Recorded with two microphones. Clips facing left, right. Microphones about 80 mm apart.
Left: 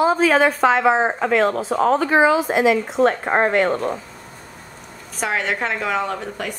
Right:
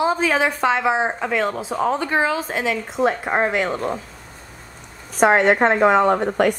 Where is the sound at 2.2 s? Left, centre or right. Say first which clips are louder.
Left 5 dB; centre.